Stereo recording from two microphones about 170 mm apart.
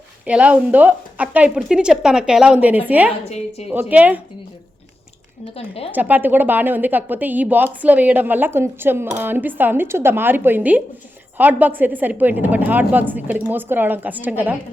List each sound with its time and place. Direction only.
0.3 s speech: 5° right (ahead or behind)
3.2 s a woman's voice: 40° left (ahead or behind)
3.7 s speech: 10° right (ahead or behind)
5.5 s a woman's voice: 35° left (ahead or behind)
5.9 s speech: 10° right (ahead or behind)